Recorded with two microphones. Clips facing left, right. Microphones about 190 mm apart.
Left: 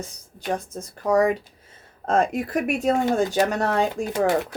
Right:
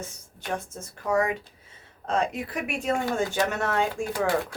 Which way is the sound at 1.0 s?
40° left (ahead or behind).